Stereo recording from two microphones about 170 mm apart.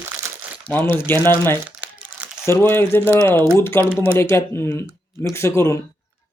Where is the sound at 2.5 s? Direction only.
15° left (ahead or behind).